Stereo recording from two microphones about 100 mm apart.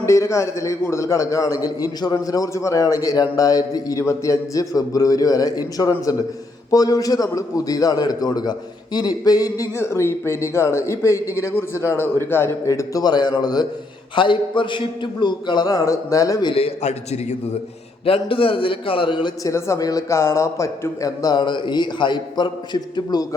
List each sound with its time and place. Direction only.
0.0 s a man's voice: 30° left (ahead or behind)
9.7 s a man's voice: 25° left (ahead or behind); by 13.7 s 45° left (ahead or behind)
14.2 s a man's voice: 55° left (ahead or behind); by 16.5 s 35° left (ahead or behind)
16.6 s a man's voice: 85° left
18.0 s a man's voice: 65° left (ahead or behind)
19.4 s a man's voice: 30° left (ahead or behind); by 23.2 s 50° left (ahead or behind)